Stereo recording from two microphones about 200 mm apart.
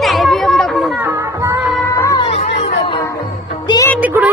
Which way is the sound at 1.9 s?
15° left (ahead or behind).